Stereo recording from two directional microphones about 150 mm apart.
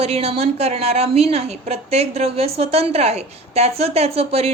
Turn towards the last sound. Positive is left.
turn(degrees=-45)  # may be behind; listen again after turning